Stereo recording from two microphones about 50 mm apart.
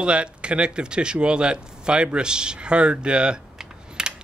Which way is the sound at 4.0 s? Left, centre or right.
Centre.